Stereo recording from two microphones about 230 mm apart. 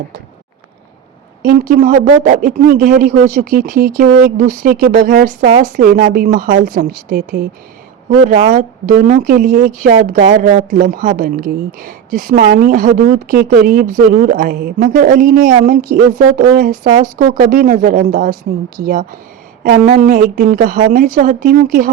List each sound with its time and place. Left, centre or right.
1.4 s speech: right